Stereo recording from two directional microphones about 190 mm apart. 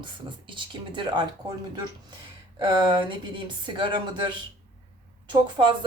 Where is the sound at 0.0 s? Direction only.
25° right (ahead or behind).